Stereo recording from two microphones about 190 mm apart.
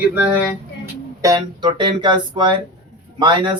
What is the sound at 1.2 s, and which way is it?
Speech, 20° right (ahead or behind).